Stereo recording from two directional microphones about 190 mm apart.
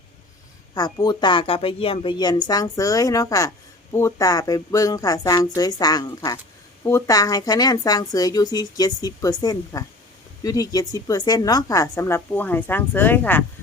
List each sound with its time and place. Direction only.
0.7 s a woman's voice: 20° left (ahead or behind)